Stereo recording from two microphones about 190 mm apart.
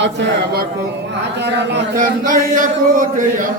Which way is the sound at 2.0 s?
45° right (ahead or behind).